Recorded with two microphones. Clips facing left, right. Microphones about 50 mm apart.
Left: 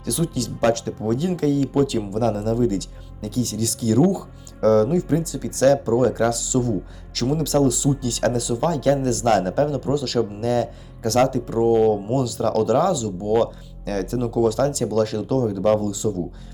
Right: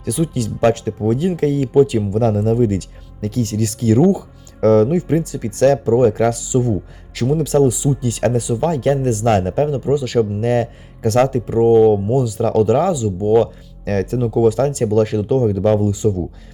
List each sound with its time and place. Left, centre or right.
0.0 s speech: right
6.5 s speech: right